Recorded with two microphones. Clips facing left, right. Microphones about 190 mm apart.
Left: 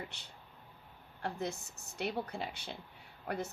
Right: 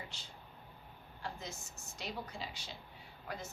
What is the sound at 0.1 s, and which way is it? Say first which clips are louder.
A woman's voice: right 1 dB; 65° left (ahead or behind).